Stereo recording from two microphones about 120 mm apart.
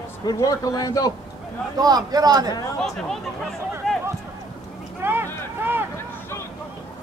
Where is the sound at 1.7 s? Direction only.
35° right (ahead or behind).